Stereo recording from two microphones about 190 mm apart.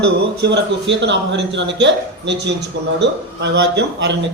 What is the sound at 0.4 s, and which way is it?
A man's voice, 65° right (ahead or behind).